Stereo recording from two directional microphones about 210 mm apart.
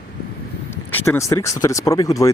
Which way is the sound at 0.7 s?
10° left (ahead or behind).